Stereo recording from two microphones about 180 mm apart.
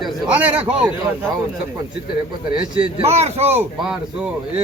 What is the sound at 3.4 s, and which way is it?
Speech, 10° right (ahead or behind).